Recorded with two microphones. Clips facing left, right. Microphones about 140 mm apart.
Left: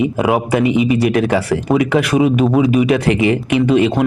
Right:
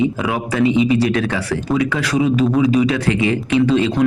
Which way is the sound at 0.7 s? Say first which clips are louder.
Left 1 dB; 25° right (ahead or behind).